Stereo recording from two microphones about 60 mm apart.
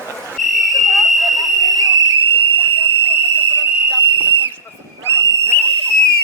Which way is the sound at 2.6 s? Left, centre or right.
Left.